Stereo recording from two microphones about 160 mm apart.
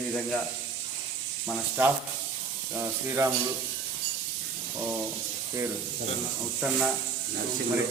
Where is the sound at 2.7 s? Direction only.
15° right (ahead or behind).